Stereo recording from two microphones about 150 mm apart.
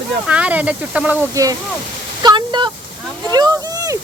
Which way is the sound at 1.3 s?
25° right (ahead or behind).